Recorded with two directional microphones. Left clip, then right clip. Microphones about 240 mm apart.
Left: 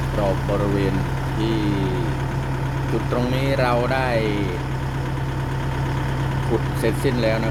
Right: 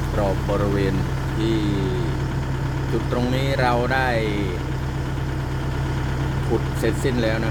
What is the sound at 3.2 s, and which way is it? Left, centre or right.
Speech, centre.